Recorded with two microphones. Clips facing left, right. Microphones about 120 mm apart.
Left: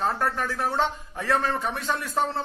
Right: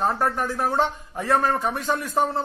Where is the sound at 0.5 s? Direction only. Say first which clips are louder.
Right 3 dB; 45° right (ahead or behind).